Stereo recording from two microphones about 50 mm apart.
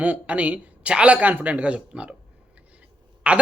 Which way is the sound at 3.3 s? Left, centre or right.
Right.